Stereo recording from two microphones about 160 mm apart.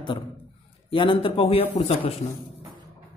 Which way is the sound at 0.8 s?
30° left (ahead or behind).